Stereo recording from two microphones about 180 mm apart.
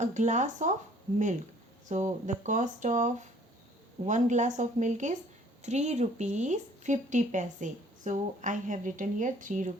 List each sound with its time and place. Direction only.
0.0 s speech: 40° right (ahead or behind)
1.9 s speech: 40° right (ahead or behind)